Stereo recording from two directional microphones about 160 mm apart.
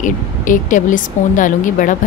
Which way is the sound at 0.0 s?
55° left (ahead or behind).